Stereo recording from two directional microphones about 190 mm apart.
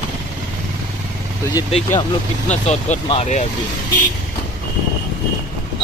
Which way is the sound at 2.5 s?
35° left (ahead or behind).